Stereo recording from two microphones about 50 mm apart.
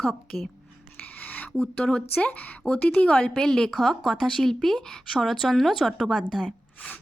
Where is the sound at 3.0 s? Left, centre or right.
Centre.